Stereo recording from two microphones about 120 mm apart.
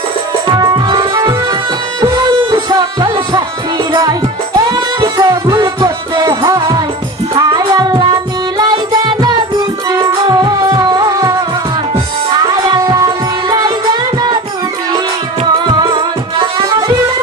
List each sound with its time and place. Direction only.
0.5 s music: 35° right (ahead or behind)
12.4 s music: 30° right (ahead or behind)
15.7 s music: 40° right (ahead or behind)